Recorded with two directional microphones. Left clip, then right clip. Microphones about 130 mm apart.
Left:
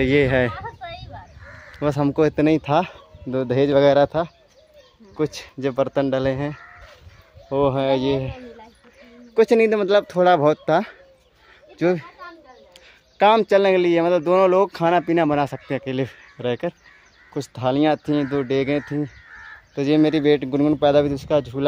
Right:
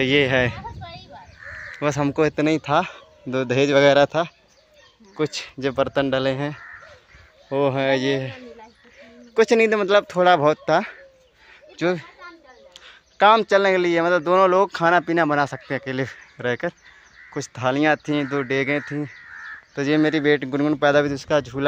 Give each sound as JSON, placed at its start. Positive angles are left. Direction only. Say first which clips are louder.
{"t": 0.0, "sound": "speech", "louder": "even", "side_deg": 10}
{"t": 1.8, "sound": "speech", "louder": "left 1 dB", "side_deg": 10}
{"t": 3.3, "sound": "speech", "louder": "even", "side_deg": 5}
{"t": 3.8, "sound": "speech", "louder": "even", "side_deg": -10}
{"t": 11.7, "sound": "speech", "louder": "left 2 dB", "side_deg": 25}
{"t": 12.7, "sound": "speech", "louder": "even", "side_deg": 15}